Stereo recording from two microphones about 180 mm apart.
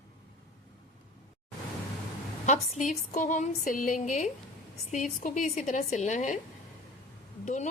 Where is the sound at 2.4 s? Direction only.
40° left (ahead or behind).